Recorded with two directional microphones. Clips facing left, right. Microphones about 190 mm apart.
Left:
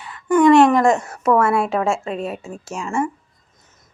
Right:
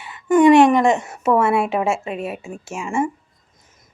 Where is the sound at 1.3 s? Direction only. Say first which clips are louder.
Left 1 dB; 20° right (ahead or behind).